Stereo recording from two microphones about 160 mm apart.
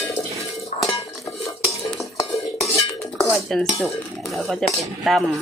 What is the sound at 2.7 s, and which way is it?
Dishes, 15° left (ahead or behind).